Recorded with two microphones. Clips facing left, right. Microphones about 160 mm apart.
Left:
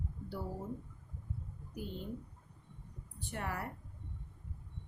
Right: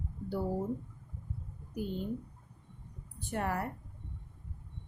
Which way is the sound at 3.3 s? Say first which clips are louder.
Right 7 dB; 45° right (ahead or behind).